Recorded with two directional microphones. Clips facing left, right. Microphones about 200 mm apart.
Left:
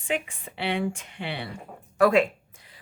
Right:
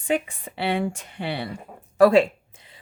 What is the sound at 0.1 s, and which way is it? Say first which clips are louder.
Speech: right 5 dB; 40° right (ahead or behind).